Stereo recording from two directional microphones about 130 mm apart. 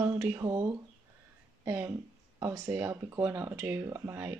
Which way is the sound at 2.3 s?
25° right (ahead or behind).